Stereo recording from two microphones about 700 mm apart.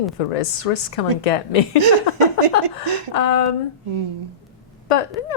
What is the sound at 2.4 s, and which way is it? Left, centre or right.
Speech, right.